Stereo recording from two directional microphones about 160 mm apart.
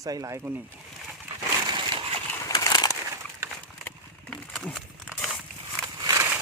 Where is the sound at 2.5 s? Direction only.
25° left (ahead or behind).